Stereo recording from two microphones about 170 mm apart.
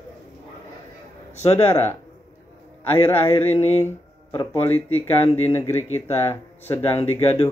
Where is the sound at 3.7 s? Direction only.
40° left (ahead or behind).